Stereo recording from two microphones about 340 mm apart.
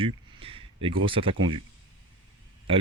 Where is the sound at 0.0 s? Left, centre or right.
Centre.